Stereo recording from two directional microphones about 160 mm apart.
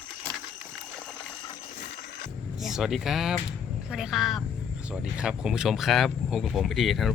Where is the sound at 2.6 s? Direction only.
Centre (ahead or behind).